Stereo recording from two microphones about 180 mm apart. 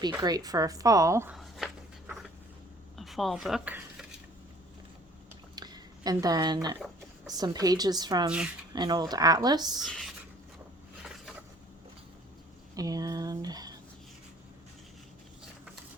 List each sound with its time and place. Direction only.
0.2 s speech: 20° right (ahead or behind)
1.3 s a sound: centre (ahead or behind)
3.0 s speech: centre (ahead or behind)
5.5 s a sound: 20° right (ahead or behind)
7.3 s speech: 20° right (ahead or behind)
9.8 s speech: 5° left (ahead or behind)
12.7 s speech: 20° right (ahead or behind)